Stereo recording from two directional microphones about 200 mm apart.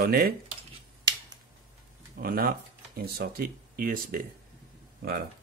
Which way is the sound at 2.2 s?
50° right (ahead or behind).